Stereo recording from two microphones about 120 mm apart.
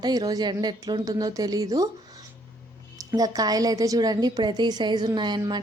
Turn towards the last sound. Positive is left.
turn(degrees=-35)  # may be behind; listen again after turning